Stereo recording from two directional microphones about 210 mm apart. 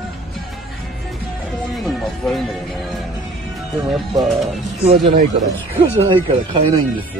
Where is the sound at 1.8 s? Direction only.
Centre (ahead or behind).